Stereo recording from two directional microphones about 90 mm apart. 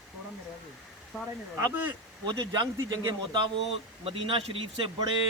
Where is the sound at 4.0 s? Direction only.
90° right.